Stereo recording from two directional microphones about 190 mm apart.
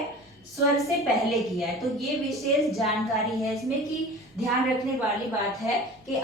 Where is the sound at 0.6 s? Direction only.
Centre (ahead or behind).